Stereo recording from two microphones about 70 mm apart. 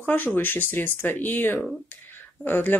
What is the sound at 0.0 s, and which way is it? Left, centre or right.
Speech, left.